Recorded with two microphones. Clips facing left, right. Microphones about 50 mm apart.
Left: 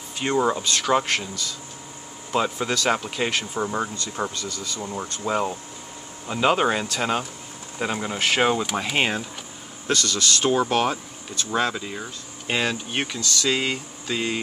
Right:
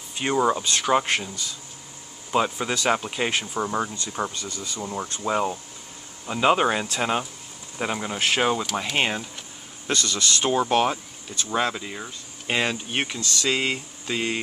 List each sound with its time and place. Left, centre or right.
0.1 s speech: centre
0.7 s speech: centre
2.3 s speech: centre
3.5 s speech: centre
4.4 s speech: right
5.2 s speech: centre